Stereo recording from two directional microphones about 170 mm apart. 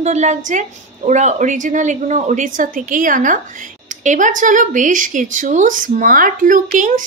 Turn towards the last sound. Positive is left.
turn(degrees=-50)  # may be behind; listen again after turning